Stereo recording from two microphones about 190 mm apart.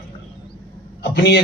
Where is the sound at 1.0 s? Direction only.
60° left (ahead or behind).